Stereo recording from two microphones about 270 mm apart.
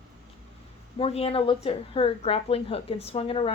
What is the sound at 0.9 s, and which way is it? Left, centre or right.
Speech, left.